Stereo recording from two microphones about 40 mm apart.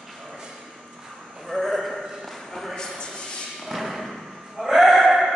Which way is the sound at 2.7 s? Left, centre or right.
Centre.